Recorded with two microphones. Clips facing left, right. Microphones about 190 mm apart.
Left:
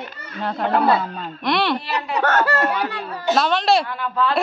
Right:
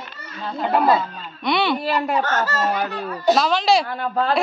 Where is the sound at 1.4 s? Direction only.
Centre (ahead or behind).